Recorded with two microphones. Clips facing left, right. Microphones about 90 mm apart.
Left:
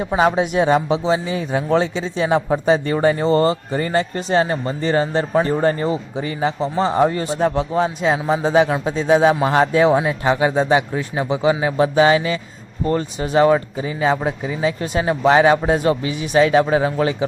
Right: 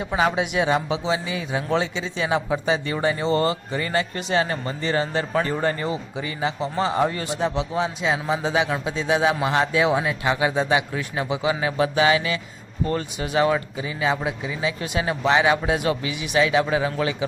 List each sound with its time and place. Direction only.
0.2 s a man's voice: 35° left (ahead or behind)
7.3 s a man's voice: 45° left (ahead or behind)